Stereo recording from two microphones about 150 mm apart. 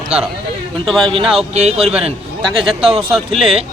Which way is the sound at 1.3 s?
45° right (ahead or behind).